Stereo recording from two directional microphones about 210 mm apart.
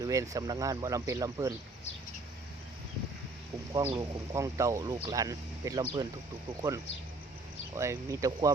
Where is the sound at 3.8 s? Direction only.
20° right (ahead or behind).